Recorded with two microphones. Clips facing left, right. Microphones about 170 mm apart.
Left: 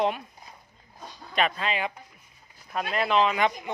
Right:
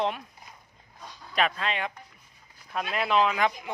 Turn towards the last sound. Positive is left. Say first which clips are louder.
# left 1 dB
turn(degrees=0)  # may be behind; listen again after turning